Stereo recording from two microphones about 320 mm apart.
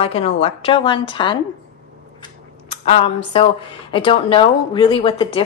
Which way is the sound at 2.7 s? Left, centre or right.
Centre.